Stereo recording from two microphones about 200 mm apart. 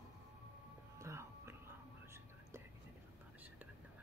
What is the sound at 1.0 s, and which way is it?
Whispering, 15° right (ahead or behind).